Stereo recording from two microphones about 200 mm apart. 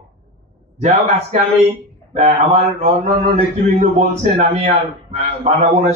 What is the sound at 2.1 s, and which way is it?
A man's voice, 35° right (ahead or behind).